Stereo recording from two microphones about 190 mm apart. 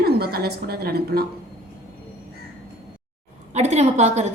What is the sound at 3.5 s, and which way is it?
Speech, 35° right (ahead or behind).